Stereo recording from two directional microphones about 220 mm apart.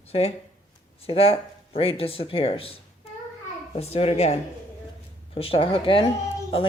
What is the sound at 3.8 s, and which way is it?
Speech, 30° left (ahead or behind).